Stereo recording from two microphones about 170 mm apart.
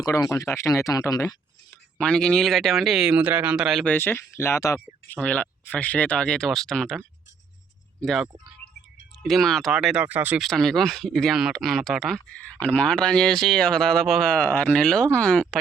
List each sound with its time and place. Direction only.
0.0 s speech: 20° left (ahead or behind)
2.0 s speech: 5° left (ahead or behind)
3.8 s speech: 10° left (ahead or behind)
8.0 s speech: centre (ahead or behind)
10.4 s speech: 5° left (ahead or behind)